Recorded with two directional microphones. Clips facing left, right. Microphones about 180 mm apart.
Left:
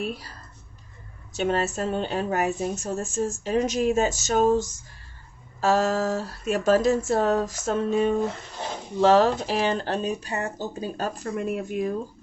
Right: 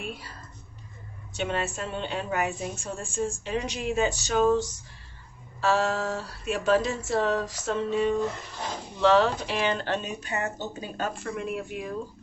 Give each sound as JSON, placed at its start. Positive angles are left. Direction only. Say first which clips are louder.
{"t": 0.0, "sound": "speech", "louder": "left 6 dB", "side_deg": 40}
{"t": 1.3, "sound": "a woman's voice", "louder": "left 5 dB", "side_deg": 40}